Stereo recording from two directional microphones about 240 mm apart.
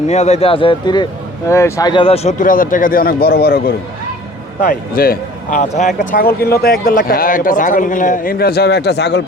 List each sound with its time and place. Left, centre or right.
0.1 s a man's voice: left